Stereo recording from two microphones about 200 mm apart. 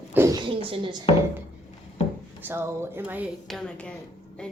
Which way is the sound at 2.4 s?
10° right (ahead or behind).